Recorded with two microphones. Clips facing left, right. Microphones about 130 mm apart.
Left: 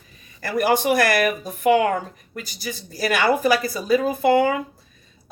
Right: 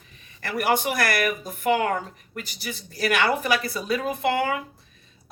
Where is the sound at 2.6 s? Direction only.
35° left (ahead or behind).